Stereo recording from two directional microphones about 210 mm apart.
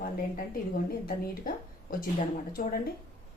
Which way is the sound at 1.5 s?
40° left (ahead or behind).